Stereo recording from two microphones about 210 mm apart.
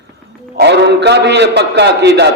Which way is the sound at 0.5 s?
55° right (ahead or behind).